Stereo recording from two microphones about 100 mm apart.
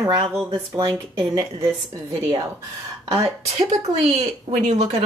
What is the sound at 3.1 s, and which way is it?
A woman's voice, 90° right.